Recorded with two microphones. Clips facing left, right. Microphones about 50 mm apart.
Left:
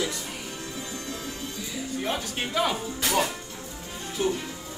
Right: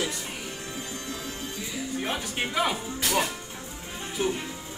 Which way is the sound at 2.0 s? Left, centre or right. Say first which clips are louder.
Left 1 dB; centre.